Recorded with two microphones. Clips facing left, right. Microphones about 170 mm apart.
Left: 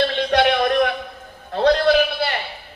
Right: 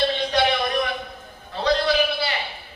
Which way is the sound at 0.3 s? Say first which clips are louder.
Left 5 dB; 55° left (ahead or behind).